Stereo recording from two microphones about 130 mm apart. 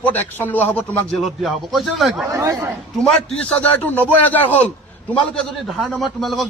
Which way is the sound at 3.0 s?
5° left (ahead or behind).